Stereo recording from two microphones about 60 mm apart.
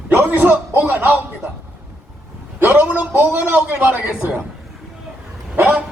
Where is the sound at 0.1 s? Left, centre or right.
Right.